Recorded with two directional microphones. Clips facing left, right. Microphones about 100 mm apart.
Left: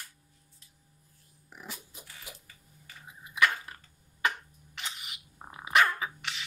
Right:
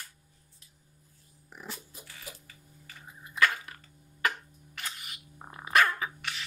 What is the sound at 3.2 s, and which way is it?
Dog, 15° left (ahead or behind).